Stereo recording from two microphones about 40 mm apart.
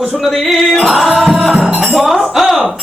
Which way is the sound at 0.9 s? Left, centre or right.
Centre.